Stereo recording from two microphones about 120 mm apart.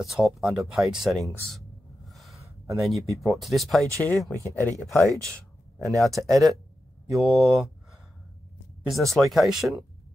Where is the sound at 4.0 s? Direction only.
15° left (ahead or behind).